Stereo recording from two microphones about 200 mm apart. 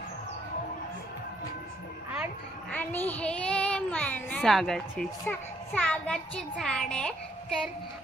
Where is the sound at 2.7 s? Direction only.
10° left (ahead or behind).